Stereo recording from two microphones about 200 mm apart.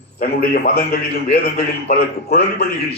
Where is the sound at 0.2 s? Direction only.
50° left (ahead or behind).